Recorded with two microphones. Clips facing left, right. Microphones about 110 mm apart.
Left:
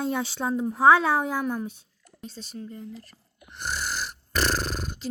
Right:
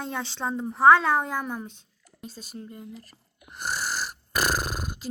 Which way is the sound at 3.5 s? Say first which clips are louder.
Right 1 dB; 40° right (ahead or behind).